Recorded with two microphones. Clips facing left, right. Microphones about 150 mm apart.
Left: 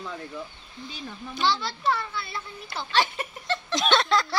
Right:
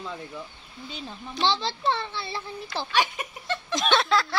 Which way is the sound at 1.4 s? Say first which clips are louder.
Right 1 dB; 25° right (ahead or behind).